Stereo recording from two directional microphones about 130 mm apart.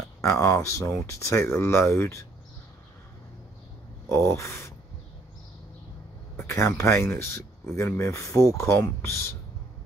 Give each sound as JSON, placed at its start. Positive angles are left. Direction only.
{"t": 0.2, "sound": "speech", "side_deg": 20}
{"t": 4.1, "sound": "speech", "side_deg": 20}
{"t": 6.3, "sound": "speech", "side_deg": 20}